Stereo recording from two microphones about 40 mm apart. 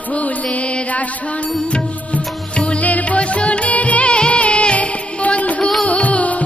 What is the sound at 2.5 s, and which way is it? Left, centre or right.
Music, left.